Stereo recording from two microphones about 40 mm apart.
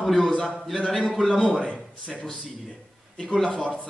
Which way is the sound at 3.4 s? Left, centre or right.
Left.